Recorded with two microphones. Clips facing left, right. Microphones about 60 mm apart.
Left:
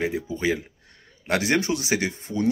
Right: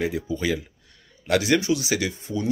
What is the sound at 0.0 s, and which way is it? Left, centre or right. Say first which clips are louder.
Speech: even; left.